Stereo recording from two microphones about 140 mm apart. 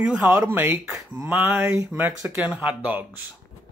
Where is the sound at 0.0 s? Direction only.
10° right (ahead or behind).